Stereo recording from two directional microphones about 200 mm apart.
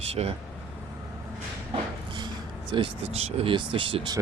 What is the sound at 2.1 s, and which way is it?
Vehicle, 25° right (ahead or behind).